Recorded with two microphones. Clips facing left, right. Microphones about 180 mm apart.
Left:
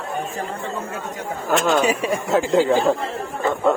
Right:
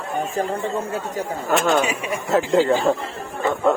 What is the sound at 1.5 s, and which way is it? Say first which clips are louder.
Speech: left 1 dB; centre (ahead or behind).